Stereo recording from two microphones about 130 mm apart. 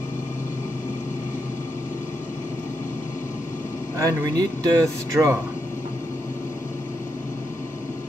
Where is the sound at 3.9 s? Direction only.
30° right (ahead or behind).